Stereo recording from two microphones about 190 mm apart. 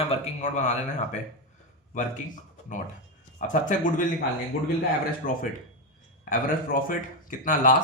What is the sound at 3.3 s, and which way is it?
Speech, 40° left (ahead or behind).